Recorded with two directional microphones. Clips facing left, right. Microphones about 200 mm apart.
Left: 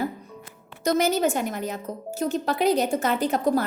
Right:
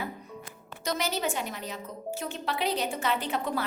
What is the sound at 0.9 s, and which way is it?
A woman's voice, 50° left (ahead or behind).